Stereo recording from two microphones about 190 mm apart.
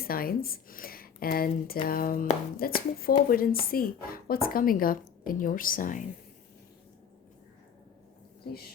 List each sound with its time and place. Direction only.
0.0 s a woman's voice: 50° left (ahead or behind)